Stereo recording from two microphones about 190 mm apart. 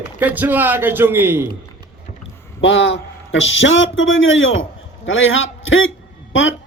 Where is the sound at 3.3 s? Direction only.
80° left.